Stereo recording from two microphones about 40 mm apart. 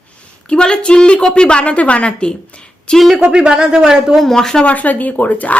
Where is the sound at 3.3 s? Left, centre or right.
Centre.